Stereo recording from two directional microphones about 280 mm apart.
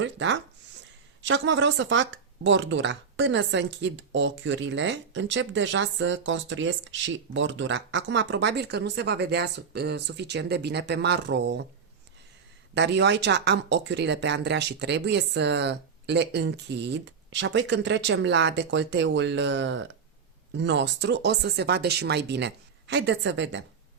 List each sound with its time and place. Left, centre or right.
0.0 s speech: right
12.7 s speech: right